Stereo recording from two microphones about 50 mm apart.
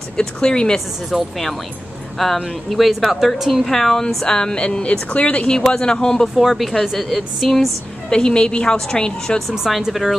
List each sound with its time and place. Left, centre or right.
0.2 s speech: centre
1.1 s a woman's voice: centre
3.6 s speech: centre; by 5.5 s left
5.5 s speech: centre
6.2 s a woman's voice: centre
8.1 s speech: centre
9.5 s a woman's voice: centre